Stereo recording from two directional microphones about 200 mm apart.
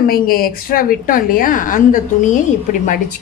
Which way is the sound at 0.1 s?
45° left (ahead or behind).